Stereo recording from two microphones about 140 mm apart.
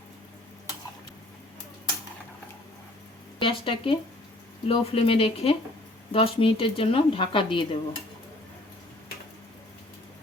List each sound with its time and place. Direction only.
3.4 s speech: 40° left (ahead or behind)